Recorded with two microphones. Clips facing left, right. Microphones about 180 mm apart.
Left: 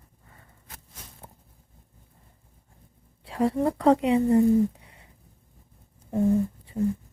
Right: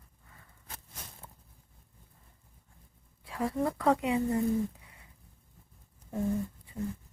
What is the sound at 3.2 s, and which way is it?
Speech, 30° left (ahead or behind).